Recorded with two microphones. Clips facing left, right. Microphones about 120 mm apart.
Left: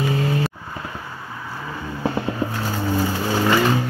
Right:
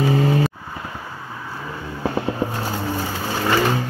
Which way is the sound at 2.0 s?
10° right (ahead or behind).